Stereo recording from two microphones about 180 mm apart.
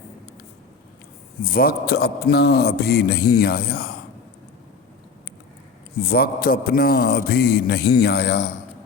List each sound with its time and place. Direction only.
1.5 s a man's voice: 55° left (ahead or behind)
6.0 s a man's voice: 60° left (ahead or behind)